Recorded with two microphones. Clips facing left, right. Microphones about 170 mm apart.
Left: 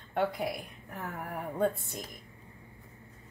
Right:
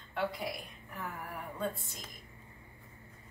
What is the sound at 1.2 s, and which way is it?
Speech, 55° left (ahead or behind).